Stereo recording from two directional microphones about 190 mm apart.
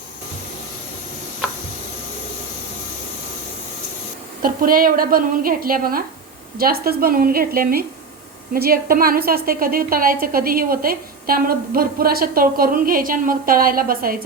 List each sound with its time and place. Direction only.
4.4 s a woman's voice: 50° right (ahead or behind)